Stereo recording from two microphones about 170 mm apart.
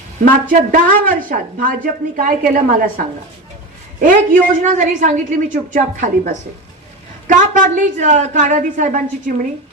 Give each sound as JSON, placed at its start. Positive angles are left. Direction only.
{"t": 0.3, "sound": "a woman's voice", "side_deg": -55}
{"t": 4.0, "sound": "a woman's voice", "side_deg": -50}